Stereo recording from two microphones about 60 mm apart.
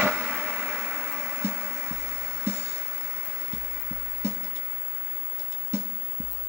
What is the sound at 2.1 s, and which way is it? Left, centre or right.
Music, right.